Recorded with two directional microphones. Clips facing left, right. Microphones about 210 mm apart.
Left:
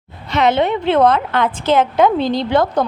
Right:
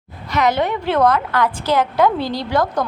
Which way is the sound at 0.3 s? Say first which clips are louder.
Left 3 dB; 25° left (ahead or behind).